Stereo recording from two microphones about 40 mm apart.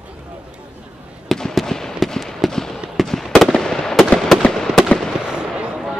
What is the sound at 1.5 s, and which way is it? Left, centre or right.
Fireworks, centre.